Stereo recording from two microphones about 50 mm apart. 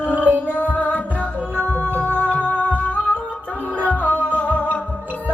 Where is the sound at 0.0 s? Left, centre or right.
Left.